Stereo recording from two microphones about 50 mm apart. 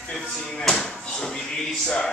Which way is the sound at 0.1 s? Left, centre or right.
Centre.